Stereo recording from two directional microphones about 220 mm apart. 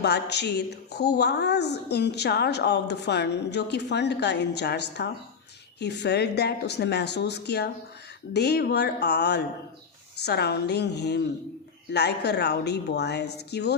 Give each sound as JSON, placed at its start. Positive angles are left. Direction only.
{"t": 0.0, "sound": "a woman's voice", "side_deg": 50}